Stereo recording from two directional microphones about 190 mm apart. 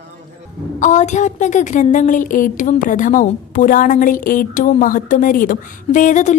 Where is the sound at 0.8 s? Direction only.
40° left (ahead or behind).